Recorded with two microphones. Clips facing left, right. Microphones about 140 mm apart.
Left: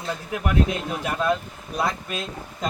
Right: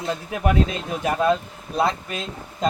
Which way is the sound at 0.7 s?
20° right (ahead or behind).